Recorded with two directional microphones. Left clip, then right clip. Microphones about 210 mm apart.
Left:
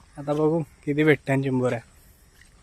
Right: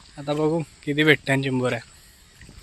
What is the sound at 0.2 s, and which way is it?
Speech, centre (ahead or behind).